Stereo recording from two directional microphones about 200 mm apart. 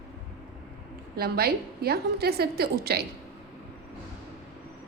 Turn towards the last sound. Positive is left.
turn(degrees=-50)  # may be behind; listen again after turning